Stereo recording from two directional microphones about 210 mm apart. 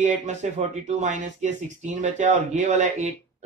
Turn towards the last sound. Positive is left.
turn(degrees=-35)  # may be behind; listen again after turning